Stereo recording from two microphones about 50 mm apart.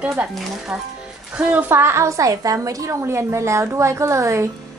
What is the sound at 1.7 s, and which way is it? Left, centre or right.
Speech, right.